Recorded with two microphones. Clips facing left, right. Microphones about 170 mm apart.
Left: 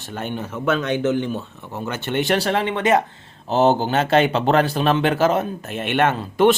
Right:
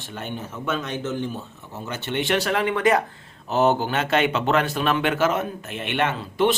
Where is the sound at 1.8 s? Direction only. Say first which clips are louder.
Left 4 dB; 55° left (ahead or behind).